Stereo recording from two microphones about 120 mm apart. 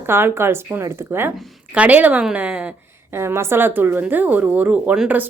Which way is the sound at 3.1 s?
20° right (ahead or behind).